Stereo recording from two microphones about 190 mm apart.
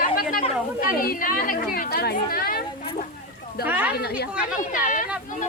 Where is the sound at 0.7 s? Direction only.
50° left (ahead or behind).